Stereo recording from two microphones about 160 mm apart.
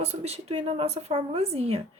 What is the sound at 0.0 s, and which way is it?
Speech, 40° right (ahead or behind).